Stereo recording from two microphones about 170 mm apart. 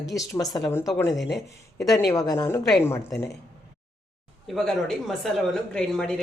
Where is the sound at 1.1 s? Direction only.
Centre (ahead or behind).